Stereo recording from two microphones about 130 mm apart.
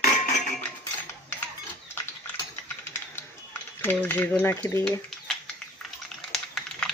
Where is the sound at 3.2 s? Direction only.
15° left (ahead or behind).